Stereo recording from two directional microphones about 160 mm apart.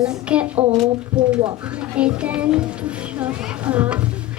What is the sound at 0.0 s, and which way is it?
A child's voice, 5° right (ahead or behind).